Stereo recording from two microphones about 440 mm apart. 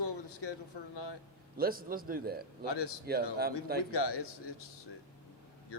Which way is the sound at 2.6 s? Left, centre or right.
Left.